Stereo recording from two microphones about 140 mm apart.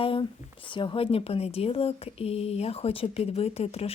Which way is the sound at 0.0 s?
40° left (ahead or behind).